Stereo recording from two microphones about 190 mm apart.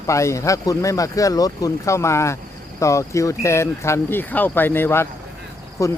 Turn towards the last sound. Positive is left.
turn(degrees=15)  # may be behind; listen again after turning